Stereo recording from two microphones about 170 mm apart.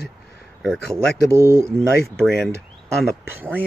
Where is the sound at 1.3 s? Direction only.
15° right (ahead or behind).